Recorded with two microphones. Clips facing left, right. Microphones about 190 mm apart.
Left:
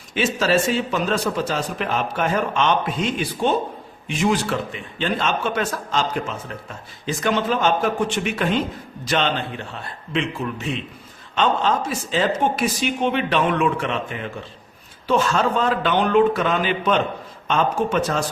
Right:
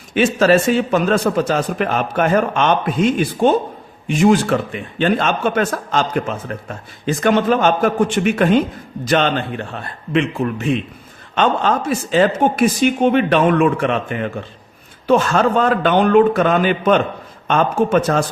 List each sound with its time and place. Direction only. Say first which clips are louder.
0.1 s a man's voice: right 6 dB; 55° right (ahead or behind)